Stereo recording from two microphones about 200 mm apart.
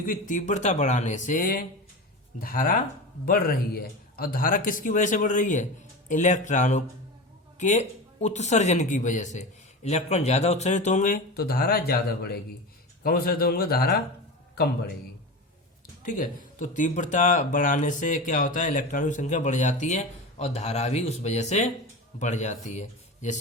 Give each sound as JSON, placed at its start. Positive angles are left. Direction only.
{"t": 0.0, "sound": "a man's voice", "side_deg": 45}
{"t": 16.0, "sound": "speech", "side_deg": 40}